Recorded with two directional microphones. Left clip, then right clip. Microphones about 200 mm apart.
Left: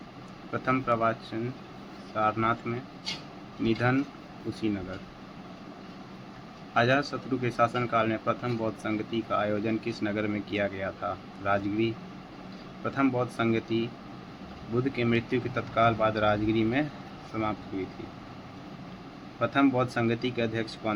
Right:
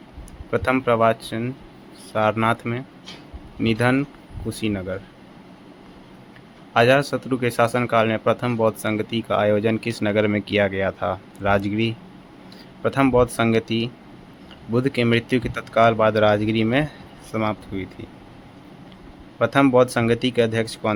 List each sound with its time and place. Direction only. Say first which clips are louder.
0.5 s a man's voice: right 8 dB; 60° right (ahead or behind)
6.7 s a man's voice: right 9 dB; 60° right (ahead or behind)
14.8 s a man's voice: right 8 dB; 60° right (ahead or behind)
19.4 s a man's voice: right 9 dB; 60° right (ahead or behind)